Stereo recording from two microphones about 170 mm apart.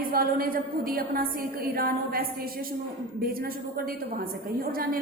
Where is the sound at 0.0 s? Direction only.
60° right (ahead or behind).